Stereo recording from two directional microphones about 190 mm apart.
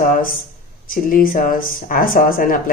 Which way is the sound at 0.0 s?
45° left (ahead or behind).